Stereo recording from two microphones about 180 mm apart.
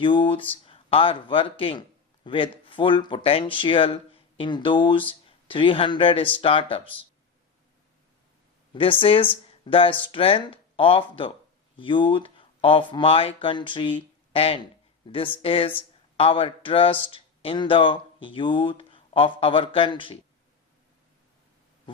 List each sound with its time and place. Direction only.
0.0 s speech: 30° left (ahead or behind)
8.7 s speech: 30° left (ahead or behind)